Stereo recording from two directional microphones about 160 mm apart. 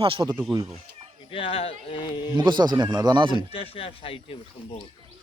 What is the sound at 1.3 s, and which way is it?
Speech, 35° left (ahead or behind).